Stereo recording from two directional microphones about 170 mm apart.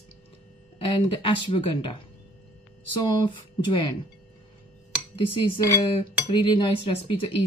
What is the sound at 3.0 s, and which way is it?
Speech, 25° left (ahead or behind).